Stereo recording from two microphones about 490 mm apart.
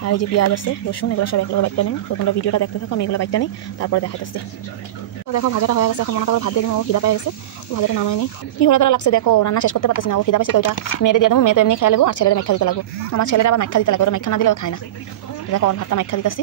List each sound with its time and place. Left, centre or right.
0.0 s a woman's voice: left